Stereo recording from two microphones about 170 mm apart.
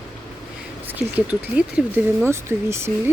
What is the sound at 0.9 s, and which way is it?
Speech, 10° right (ahead or behind).